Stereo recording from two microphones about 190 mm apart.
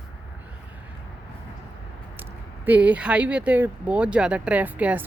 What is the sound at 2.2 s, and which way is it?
Speech, 10° right (ahead or behind).